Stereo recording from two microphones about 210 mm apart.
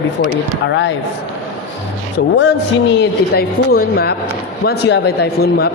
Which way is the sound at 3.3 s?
45° left (ahead or behind).